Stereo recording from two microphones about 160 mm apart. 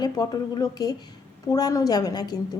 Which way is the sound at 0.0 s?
25° left (ahead or behind).